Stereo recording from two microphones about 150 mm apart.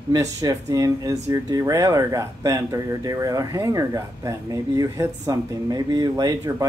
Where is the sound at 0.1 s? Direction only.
25° right (ahead or behind).